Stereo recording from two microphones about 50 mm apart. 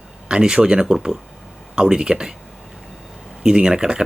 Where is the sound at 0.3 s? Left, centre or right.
Centre.